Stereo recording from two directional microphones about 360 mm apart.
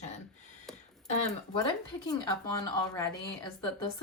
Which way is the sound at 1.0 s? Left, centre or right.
Centre.